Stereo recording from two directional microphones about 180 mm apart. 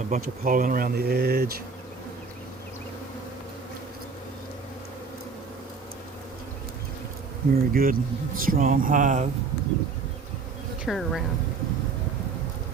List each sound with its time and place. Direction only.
0.1 s speech: 50° right (ahead or behind)
7.5 s speech: 55° right (ahead or behind)
10.8 s speech: centre (ahead or behind)